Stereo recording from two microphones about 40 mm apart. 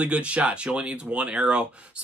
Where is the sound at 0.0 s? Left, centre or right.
Right.